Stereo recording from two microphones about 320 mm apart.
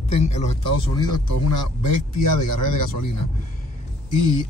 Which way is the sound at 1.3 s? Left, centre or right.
Left.